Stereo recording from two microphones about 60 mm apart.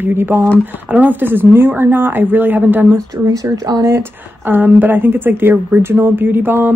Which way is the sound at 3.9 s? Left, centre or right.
Right.